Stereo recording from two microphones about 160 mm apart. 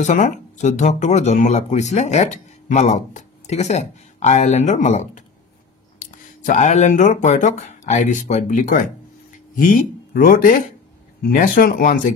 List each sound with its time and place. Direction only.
0.0 s speech: 50° left (ahead or behind)